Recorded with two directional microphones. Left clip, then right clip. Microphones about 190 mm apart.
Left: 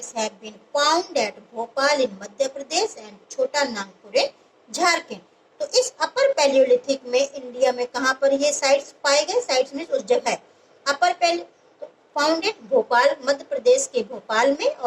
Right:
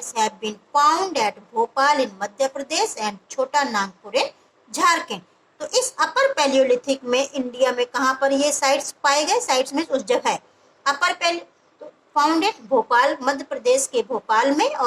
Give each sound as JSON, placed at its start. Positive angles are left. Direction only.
{"t": 0.8, "sound": "a woman's voice", "side_deg": -40}